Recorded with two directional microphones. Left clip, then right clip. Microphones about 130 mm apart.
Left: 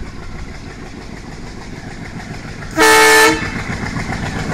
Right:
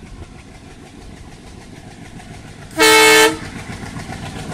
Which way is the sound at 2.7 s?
20° right (ahead or behind).